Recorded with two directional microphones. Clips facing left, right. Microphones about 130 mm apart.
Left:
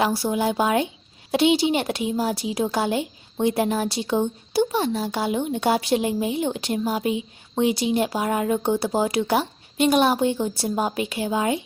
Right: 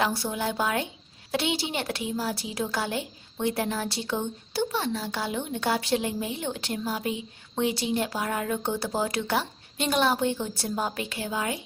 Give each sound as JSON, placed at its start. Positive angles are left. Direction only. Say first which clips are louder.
{"t": 0.0, "sound": "a woman's voice", "louder": "left 6 dB", "side_deg": 10}